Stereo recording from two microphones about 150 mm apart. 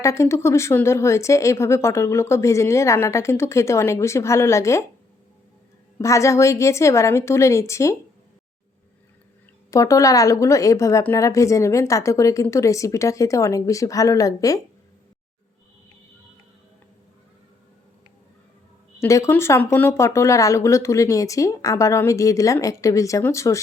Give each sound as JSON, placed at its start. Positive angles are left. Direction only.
{"t": 0.0, "sound": "a woman's voice", "side_deg": 20}
{"t": 6.0, "sound": "a woman's voice", "side_deg": 20}
{"t": 9.7, "sound": "a woman's voice", "side_deg": 20}
{"t": 18.9, "sound": "a woman's voice", "side_deg": 20}